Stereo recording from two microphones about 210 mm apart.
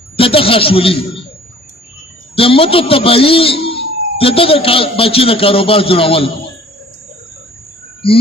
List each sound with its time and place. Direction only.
0.2 s a man's voice: 25° left (ahead or behind)
2.3 s a man's voice: 25° left (ahead or behind)
8.0 s a man's voice: 25° left (ahead or behind)